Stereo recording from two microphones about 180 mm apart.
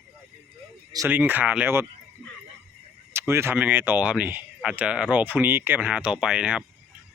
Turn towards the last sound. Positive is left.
turn(degrees=-5)  # may be behind; listen again after turning